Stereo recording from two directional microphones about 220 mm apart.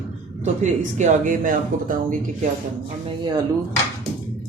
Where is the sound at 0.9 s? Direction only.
35° right (ahead or behind).